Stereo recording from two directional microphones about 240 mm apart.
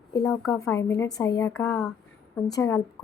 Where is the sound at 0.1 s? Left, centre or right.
Centre.